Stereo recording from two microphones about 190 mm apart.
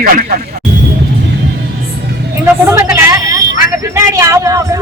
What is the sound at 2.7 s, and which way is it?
Hubbub, 15° right (ahead or behind).